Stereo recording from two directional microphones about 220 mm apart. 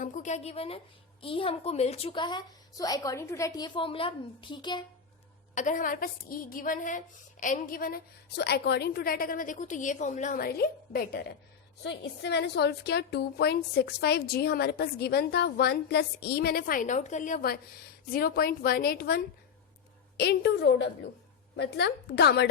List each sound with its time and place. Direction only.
0.0 s a woman's voice: 35° left (ahead or behind)
5.5 s a woman's voice: 35° left (ahead or behind)